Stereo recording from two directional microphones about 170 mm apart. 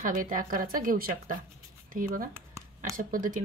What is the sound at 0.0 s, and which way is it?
Speech, 50° right (ahead or behind).